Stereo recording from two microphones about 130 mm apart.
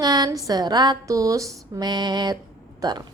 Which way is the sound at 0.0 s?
30° right (ahead or behind).